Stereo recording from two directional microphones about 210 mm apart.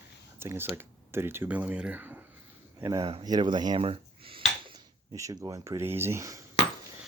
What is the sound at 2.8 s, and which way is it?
Speech, 20° right (ahead or behind).